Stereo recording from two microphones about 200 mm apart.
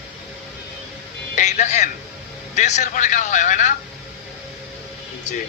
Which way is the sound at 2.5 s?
35° left (ahead or behind).